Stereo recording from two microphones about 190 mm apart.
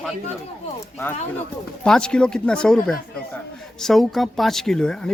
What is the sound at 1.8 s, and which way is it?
Speech, 5° left (ahead or behind).